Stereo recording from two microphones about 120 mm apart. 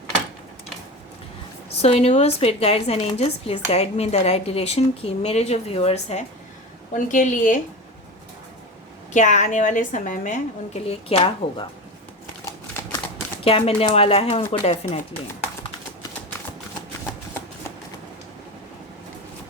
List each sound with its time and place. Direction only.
1.8 s speech: 60° left (ahead or behind)
6.9 s a woman's voice: 90° left
9.1 s a woman's voice: 90° left; by 11.6 s 50° left (ahead or behind)
13.4 s speech: 55° left (ahead or behind)